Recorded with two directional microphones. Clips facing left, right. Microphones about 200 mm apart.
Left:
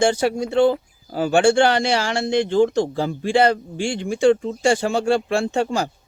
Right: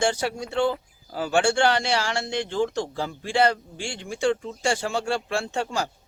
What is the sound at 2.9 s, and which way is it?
A man's voice, 20° left (ahead or behind).